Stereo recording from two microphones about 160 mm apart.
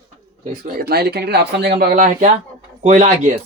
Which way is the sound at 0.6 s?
70° right (ahead or behind).